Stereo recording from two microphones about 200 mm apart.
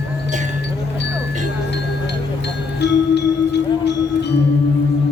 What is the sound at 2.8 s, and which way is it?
Music, 55° left (ahead or behind).